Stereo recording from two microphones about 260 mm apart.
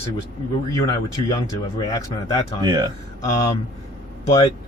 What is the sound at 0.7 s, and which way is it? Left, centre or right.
Speech, centre.